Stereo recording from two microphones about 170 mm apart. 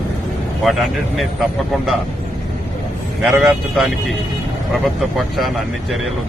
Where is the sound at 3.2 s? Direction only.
5° right (ahead or behind).